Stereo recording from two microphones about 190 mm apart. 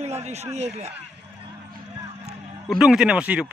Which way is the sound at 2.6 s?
5° right (ahead or behind).